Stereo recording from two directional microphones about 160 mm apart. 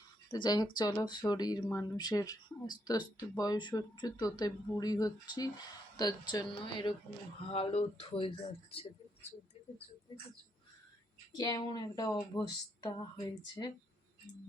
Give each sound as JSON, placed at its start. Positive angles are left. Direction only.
{"t": 0.3, "sound": "speech", "side_deg": 30}
{"t": 11.3, "sound": "speech", "side_deg": 25}